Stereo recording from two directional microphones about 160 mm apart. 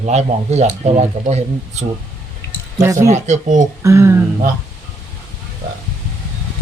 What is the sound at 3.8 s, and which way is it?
Speech, 20° right (ahead or behind).